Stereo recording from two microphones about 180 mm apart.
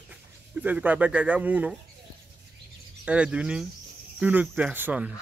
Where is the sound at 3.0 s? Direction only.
5° right (ahead or behind).